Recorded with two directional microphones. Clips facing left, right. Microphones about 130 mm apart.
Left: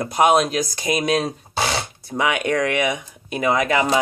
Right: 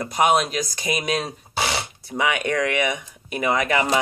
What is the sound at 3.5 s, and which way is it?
Speech, 15° left (ahead or behind).